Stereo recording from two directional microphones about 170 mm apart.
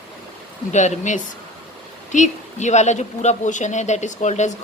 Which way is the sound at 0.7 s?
45° left (ahead or behind).